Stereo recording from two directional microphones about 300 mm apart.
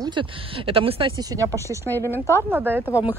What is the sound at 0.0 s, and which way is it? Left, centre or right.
Speech, centre.